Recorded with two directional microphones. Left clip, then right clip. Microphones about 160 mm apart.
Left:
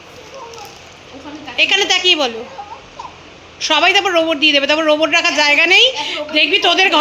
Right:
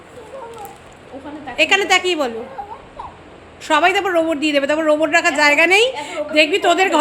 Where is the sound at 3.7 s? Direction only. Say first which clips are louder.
Left 2 dB; 5° right (ahead or behind).